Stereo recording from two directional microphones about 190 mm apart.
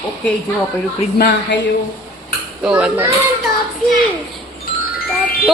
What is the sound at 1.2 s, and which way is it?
Speech, 65° left (ahead or behind).